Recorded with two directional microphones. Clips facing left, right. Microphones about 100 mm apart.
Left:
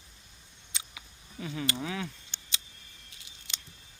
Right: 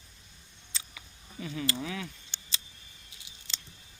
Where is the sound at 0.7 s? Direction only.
20° left (ahead or behind).